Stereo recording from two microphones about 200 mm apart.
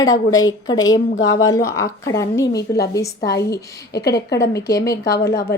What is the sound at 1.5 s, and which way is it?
A woman's voice, 15° left (ahead or behind).